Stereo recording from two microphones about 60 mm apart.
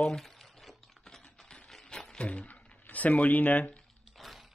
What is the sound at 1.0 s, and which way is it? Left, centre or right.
Typing, centre.